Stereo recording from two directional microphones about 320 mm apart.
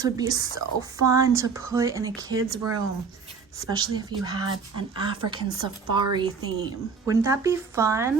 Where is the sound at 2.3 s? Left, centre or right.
Right.